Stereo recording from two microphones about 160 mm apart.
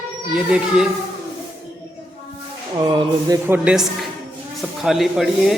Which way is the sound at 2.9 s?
25° right (ahead or behind).